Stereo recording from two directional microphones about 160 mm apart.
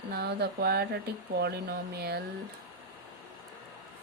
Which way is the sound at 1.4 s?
90° right.